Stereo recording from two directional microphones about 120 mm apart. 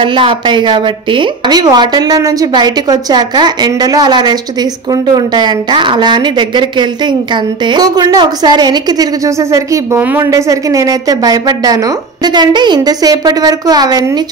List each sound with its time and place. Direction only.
0.0 s a woman's voice: 45° right (ahead or behind)